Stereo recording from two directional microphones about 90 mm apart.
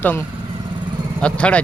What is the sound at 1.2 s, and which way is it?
Speech, 15° left (ahead or behind).